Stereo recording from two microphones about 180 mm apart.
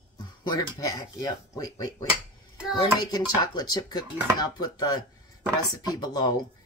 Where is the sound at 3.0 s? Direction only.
20° left (ahead or behind).